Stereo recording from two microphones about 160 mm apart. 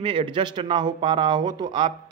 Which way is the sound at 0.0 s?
35° right (ahead or behind).